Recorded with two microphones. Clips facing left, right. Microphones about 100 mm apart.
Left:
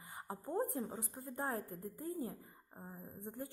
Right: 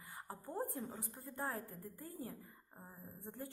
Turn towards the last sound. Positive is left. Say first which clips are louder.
# left 3 dB
turn(degrees=20)  # may be behind; listen again after turning